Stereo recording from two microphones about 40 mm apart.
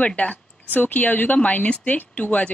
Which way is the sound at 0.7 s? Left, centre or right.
Left.